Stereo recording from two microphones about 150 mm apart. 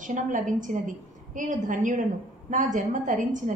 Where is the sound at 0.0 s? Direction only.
60° right (ahead or behind).